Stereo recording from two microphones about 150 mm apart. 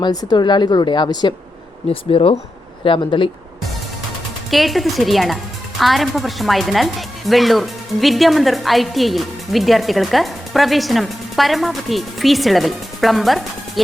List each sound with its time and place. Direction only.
0.0 s a woman's voice: 25° left (ahead or behind)
1.9 s speech: 40° left (ahead or behind)
4.5 s speech: centre (ahead or behind)